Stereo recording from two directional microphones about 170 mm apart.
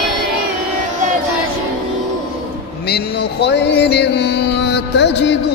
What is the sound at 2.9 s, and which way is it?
Music, 80° left.